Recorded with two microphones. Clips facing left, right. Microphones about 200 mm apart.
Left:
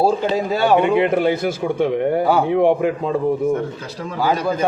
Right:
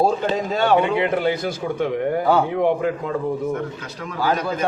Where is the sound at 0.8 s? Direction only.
25° left (ahead or behind).